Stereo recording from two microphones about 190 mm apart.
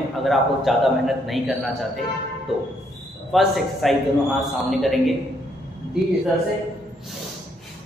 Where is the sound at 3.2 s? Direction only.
Centre (ahead or behind).